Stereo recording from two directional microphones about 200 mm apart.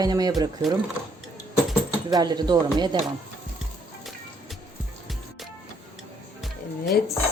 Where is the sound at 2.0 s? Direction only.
20° right (ahead or behind).